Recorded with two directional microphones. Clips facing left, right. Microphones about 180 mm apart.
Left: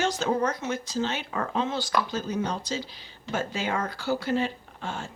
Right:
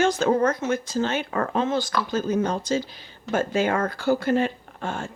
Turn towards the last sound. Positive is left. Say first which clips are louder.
# right 5 dB
turn(degrees=-50)  # may be behind; listen again after turning